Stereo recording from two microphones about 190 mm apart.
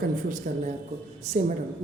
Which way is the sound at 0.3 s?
45° right (ahead or behind).